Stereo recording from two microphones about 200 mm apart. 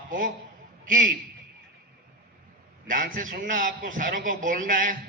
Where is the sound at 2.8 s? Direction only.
40° right (ahead or behind).